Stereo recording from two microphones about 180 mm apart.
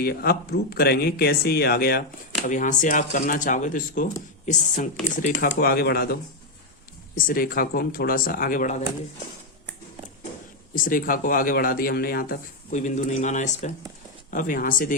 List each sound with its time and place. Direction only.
0.0 s speech: 60° left (ahead or behind)
2.5 s a man's voice: 45° left (ahead or behind)
7.2 s a man's voice: 50° left (ahead or behind)
10.8 s a man's voice: 50° left (ahead or behind)